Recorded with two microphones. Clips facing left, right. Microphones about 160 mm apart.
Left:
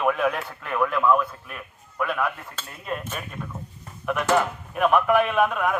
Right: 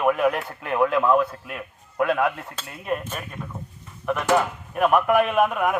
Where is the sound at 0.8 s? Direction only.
30° right (ahead or behind).